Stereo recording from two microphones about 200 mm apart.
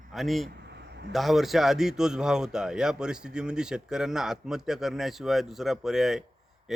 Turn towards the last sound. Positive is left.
turn(degrees=0)  # may be behind; listen again after turning